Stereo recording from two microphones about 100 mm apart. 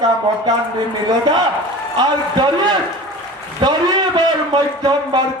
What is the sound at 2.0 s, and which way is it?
Speech, 45° right (ahead or behind).